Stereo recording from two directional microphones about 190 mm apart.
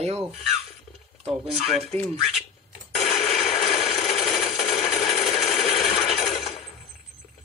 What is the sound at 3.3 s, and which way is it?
Coin, centre (ahead or behind).